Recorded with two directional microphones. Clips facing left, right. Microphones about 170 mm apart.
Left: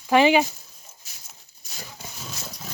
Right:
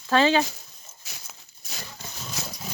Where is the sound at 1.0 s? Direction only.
75° right (ahead or behind).